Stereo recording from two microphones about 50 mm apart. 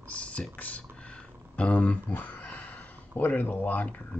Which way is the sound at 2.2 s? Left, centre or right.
Left.